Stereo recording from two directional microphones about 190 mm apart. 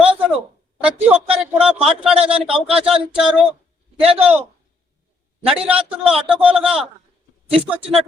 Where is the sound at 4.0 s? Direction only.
30° right (ahead or behind).